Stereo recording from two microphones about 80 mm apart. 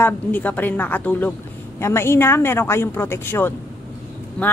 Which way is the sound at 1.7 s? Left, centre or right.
Left.